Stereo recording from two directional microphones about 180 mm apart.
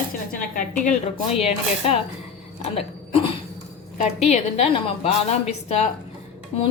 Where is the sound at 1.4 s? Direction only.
35° left (ahead or behind).